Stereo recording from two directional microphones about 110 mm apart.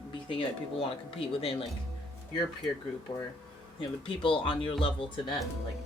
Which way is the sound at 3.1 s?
40° left (ahead or behind).